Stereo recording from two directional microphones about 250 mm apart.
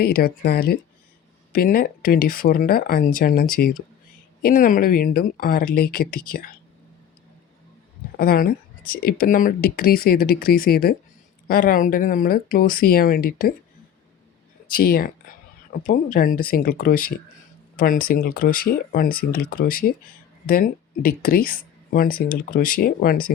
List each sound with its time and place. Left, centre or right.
0.0 s speech: left
8.2 s speech: left
14.7 s speech: left